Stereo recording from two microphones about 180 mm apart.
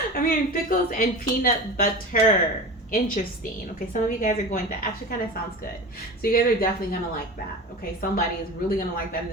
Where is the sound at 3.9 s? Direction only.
45° left (ahead or behind).